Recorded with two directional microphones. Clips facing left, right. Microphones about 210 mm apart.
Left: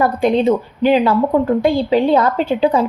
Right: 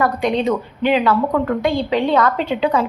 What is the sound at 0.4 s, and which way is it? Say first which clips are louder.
A woman's voice: left 4 dB; 30° left (ahead or behind).